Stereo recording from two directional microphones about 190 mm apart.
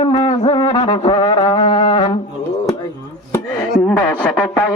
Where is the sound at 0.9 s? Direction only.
20° left (ahead or behind).